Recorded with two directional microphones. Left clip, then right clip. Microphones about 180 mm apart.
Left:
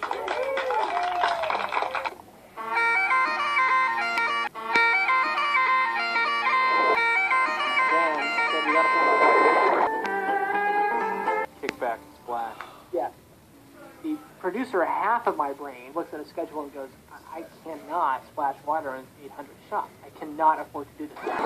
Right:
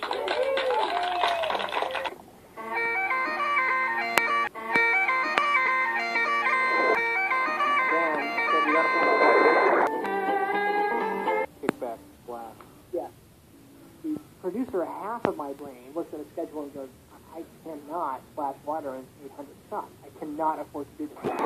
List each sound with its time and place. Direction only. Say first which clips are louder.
0.0 s a sound: right 1 dB; 40° right (ahead or behind)
2.5 s bagpipes: left 5 dB; 30° right (ahead or behind)
11.8 s music: left 6 dB; 20° right (ahead or behind)
14.4 s a sound: left 3 dB; 25° right (ahead or behind)
14.7 s speech: left 11 dB; 20° right (ahead or behind)
17.6 s speech: left 6 dB; 20° right (ahead or behind)
20.2 s speech: left 6 dB; 25° right (ahead or behind)